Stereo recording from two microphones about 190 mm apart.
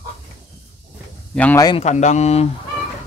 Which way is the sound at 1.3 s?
5° left (ahead or behind).